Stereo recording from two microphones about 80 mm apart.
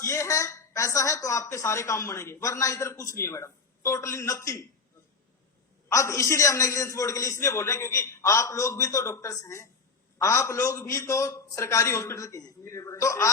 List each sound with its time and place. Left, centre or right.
0.0 s a woman's voice: left
5.9 s a woman's voice: left